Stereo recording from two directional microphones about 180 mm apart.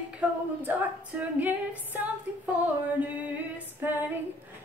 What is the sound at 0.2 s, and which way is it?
Female singing, 10° right (ahead or behind).